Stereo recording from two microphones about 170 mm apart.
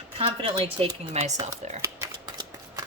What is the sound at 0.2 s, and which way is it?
Speech, 35° right (ahead or behind).